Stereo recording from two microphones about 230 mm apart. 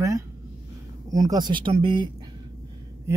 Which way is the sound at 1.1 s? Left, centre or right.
Centre.